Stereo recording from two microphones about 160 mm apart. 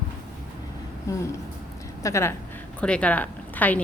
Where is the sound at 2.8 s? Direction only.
5° left (ahead or behind).